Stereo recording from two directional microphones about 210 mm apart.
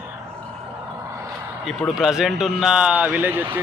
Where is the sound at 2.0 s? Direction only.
Centre (ahead or behind).